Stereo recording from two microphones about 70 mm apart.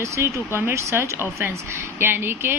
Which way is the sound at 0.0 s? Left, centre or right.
Right.